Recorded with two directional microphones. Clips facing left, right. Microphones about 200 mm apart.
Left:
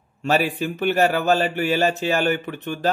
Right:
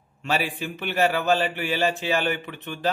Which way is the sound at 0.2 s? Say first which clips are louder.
Left 6 dB; 45° left (ahead or behind).